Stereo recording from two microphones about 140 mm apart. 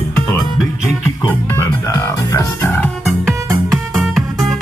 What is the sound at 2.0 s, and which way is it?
Music, 25° left (ahead or behind).